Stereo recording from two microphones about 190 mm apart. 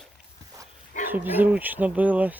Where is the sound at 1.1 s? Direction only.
10° right (ahead or behind).